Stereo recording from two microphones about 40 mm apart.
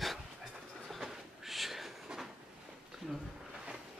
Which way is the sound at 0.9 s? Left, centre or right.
Centre.